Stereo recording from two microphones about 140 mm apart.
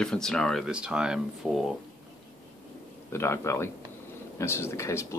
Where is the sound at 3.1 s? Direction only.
20° left (ahead or behind).